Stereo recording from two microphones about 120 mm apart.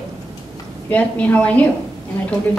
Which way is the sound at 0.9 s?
10° left (ahead or behind).